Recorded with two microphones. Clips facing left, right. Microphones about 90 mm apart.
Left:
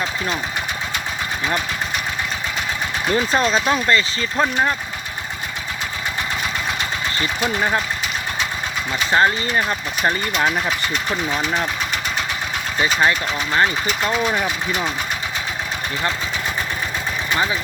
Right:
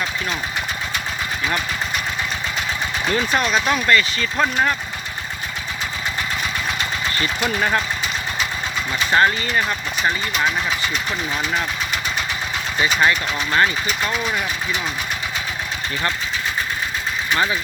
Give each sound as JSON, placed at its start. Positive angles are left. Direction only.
{"t": 3.1, "sound": "speech", "side_deg": 25}
{"t": 7.4, "sound": "speech", "side_deg": 15}
{"t": 8.9, "sound": "speech", "side_deg": 20}
{"t": 12.8, "sound": "speech", "side_deg": 25}
{"t": 13.8, "sound": "speech", "side_deg": 5}
{"t": 14.3, "sound": "speech", "side_deg": 35}